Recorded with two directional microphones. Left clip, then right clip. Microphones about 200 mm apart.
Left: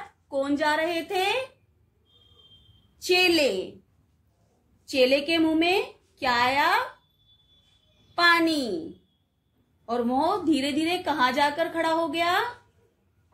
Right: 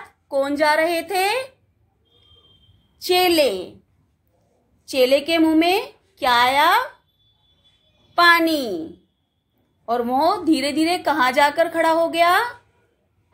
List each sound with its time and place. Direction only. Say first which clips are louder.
0.3 s a woman's voice: right 7 dB; 25° right (ahead or behind)
3.0 s a woman's voice: right 4 dB; 20° right (ahead or behind)
4.8 s a woman's voice: right 5 dB; 25° right (ahead or behind)
8.2 s a woman's voice: right 6 dB; 25° right (ahead or behind)
9.8 s a woman's voice: right 6 dB; 25° right (ahead or behind)